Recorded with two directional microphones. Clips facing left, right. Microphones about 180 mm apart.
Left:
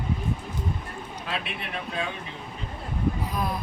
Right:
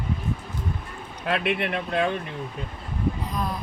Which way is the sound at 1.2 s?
60° right (ahead or behind).